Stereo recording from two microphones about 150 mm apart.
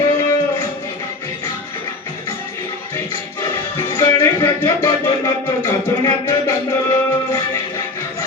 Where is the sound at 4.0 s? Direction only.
20° left (ahead or behind).